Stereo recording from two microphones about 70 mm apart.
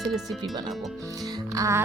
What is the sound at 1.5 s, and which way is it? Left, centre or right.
Music, right.